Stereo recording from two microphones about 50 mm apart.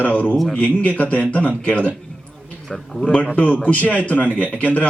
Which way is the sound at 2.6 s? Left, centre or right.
Centre.